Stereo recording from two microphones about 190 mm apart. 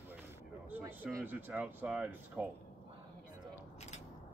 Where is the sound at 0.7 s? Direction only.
10° right (ahead or behind).